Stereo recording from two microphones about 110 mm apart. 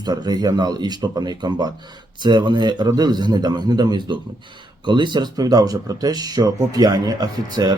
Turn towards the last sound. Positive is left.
turn(degrees=-40)  # may be behind; listen again after turning